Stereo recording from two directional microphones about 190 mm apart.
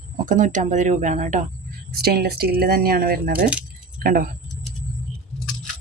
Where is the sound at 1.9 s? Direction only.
55° right (ahead or behind).